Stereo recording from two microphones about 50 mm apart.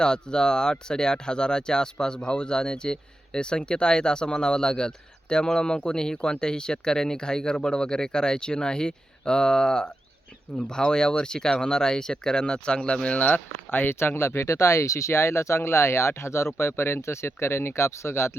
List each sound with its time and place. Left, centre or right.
0.0 s speech: centre; by 13.9 s left
14.0 s speech: left
16.6 s speech: left
17.0 s speech: left